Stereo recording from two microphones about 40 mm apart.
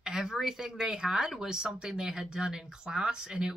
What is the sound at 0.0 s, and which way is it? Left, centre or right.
Speech, centre.